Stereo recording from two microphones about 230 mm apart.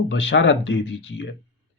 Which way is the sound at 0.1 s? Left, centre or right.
Left.